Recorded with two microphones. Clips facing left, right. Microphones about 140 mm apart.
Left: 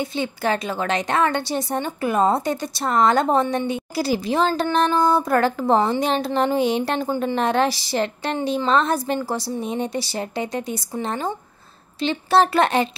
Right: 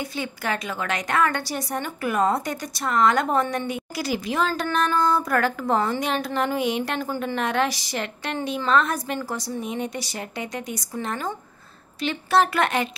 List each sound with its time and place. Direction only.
0.0 s a woman's voice: 25° left (ahead or behind)